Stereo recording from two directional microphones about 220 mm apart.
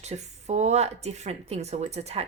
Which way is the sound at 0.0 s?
30° right (ahead or behind).